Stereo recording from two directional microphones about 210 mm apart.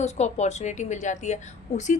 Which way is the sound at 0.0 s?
30° left (ahead or behind).